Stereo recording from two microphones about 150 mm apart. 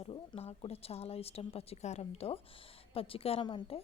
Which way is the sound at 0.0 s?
40° left (ahead or behind).